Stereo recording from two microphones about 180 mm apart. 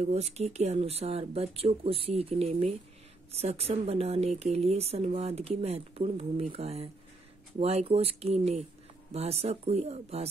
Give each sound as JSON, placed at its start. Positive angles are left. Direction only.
{"t": 0.0, "sound": "speech", "side_deg": -35}